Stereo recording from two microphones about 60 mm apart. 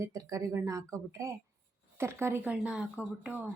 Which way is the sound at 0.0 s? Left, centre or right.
Right.